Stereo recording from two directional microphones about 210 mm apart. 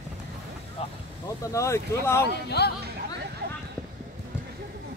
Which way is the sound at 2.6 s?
50° left (ahead or behind).